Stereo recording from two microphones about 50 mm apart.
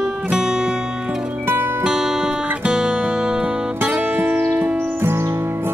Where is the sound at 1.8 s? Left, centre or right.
Centre; by 4.8 s right.